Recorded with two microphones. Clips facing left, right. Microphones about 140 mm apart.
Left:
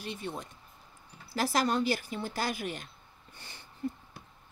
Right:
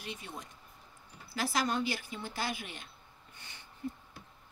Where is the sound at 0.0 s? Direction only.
30° left (ahead or behind).